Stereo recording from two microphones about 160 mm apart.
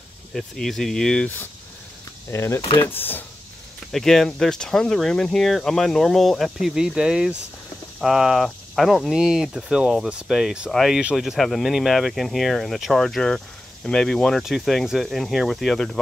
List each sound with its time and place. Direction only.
0.3 s speech: centre (ahead or behind)
3.9 s speech: centre (ahead or behind)